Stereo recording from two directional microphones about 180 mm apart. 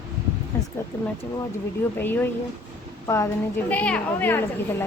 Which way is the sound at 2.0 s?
10° left (ahead or behind).